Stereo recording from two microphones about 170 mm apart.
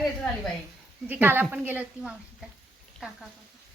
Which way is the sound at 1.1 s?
10° right (ahead or behind).